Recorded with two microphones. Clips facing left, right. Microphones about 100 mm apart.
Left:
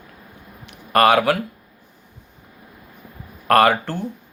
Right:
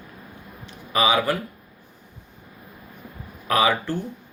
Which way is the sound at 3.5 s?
65° left (ahead or behind).